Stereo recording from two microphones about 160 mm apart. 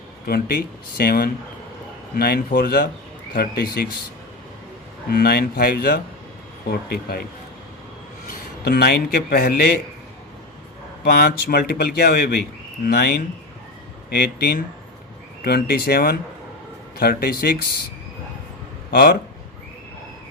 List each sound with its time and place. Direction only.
0.3 s speech: 70° left (ahead or behind)
5.0 s speech: 80° left
8.3 s speech: 80° left
11.0 s speech: 80° left
15.4 s speech: 70° left (ahead or behind)
18.9 s speech: 80° left